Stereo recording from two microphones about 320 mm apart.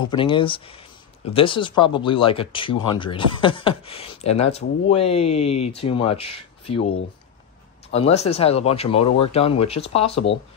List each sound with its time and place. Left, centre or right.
0.0 s speech: centre
7.9 s speech: centre